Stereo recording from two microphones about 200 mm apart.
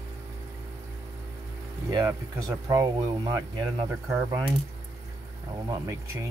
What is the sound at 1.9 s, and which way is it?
Speech, 20° right (ahead or behind).